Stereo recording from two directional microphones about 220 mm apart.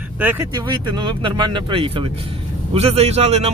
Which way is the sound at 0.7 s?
20° right (ahead or behind).